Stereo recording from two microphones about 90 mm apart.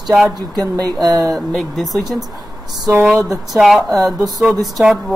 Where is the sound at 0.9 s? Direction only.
45° right (ahead or behind).